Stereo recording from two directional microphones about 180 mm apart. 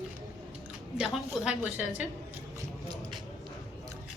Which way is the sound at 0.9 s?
5° right (ahead or behind).